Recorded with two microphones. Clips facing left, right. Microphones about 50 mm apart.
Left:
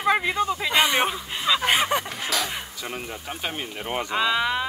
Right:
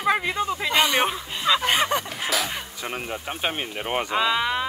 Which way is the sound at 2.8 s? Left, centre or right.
Right.